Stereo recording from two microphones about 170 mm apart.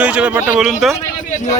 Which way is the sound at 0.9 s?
45° left (ahead or behind).